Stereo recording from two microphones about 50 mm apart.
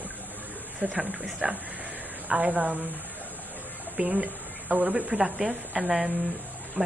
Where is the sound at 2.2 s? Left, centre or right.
Right.